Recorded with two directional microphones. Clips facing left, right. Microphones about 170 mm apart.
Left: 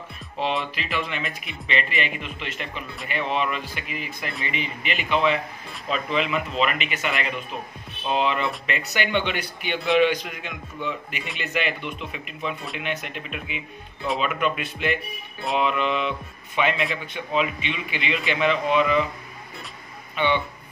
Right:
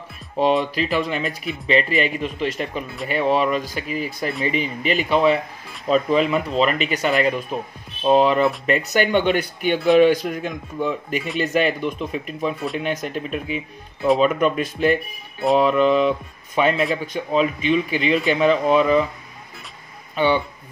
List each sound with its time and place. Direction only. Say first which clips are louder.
0.4 s speech: right 8 dB; 40° right (ahead or behind)
20.2 s speech: right 5 dB; 35° right (ahead or behind)